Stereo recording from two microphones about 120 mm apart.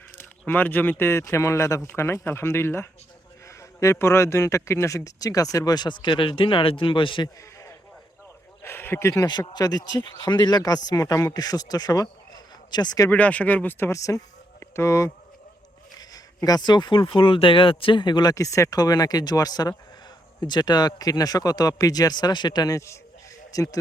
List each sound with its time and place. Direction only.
0.2 s a man's voice: 15° left (ahead or behind); by 7.3 s 45° left (ahead or behind)
8.6 s speech: 20° left (ahead or behind)
9.2 s speech: 35° left (ahead or behind)
13.1 s a man's voice: 10° left (ahead or behind); by 23.7 s 30° left (ahead or behind)